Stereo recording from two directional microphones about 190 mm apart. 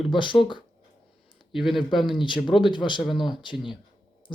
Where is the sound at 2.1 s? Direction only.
25° left (ahead or behind).